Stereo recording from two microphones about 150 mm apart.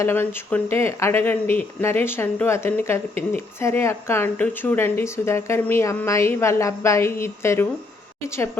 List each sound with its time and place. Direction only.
0.0 s speech: 15° left (ahead or behind)